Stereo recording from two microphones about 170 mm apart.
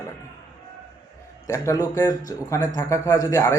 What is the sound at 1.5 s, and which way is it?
Speech, 20° left (ahead or behind).